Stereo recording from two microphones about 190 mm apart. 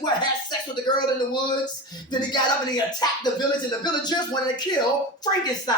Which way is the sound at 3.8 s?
20° left (ahead or behind).